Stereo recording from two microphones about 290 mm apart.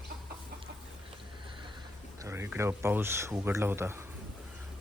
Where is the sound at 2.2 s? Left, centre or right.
Centre.